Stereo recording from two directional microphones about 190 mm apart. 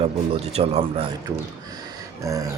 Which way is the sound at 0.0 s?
35° right (ahead or behind).